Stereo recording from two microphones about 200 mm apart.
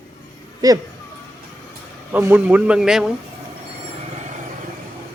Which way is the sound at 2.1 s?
10° right (ahead or behind).